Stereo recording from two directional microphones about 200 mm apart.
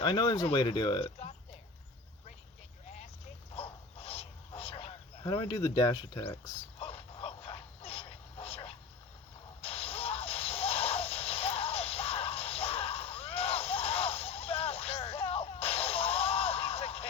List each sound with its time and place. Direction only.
0.0 s speech: 25° left (ahead or behind)
3.5 s bow-wow: 30° left (ahead or behind)
5.2 s speech: 25° left (ahead or behind)
6.7 s a sound: 30° left (ahead or behind)
9.6 s whip: 30° left (ahead or behind)